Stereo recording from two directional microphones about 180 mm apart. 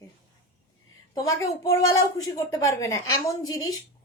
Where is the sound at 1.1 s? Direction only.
15° left (ahead or behind).